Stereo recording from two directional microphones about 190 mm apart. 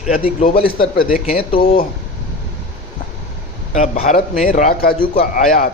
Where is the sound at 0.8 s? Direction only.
50° left (ahead or behind).